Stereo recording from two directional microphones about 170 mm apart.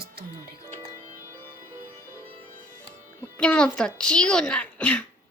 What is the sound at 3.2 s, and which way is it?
Speech, 5° left (ahead or behind).